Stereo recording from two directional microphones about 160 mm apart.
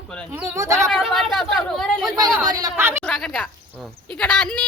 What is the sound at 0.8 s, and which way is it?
A woman's voice, centre (ahead or behind).